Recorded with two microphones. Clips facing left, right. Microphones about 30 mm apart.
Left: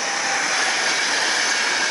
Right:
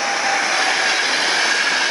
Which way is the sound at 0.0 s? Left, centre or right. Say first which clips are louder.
Right 4 dB; right.